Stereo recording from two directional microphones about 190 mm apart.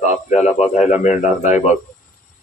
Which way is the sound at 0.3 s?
40° left (ahead or behind).